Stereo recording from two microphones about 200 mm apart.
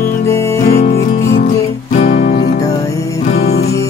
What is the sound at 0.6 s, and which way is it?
Music, 45° left (ahead or behind).